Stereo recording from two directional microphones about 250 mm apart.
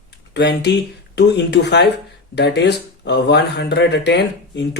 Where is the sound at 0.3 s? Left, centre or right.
Left.